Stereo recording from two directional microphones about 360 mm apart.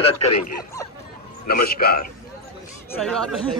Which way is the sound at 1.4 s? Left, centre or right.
Left.